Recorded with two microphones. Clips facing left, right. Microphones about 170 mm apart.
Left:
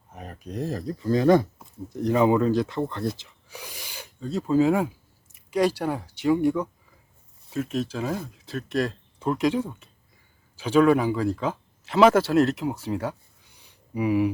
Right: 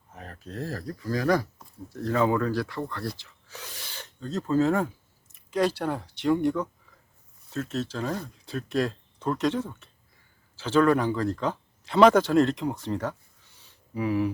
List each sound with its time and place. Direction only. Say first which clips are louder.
0.1 s speech: left 4 dB; 15° left (ahead or behind)